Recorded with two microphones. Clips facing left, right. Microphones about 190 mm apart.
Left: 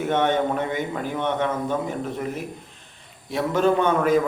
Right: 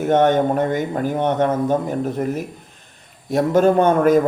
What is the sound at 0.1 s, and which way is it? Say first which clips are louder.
A man's voice: right 7 dB; 45° right (ahead or behind).